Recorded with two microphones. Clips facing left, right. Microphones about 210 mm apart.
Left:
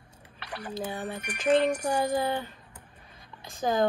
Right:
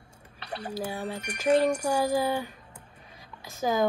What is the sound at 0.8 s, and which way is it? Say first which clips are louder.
Speech: right 1 dB; 10° right (ahead or behind).